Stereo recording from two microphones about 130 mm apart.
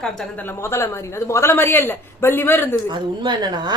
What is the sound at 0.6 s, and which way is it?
A woman's voice, 20° left (ahead or behind).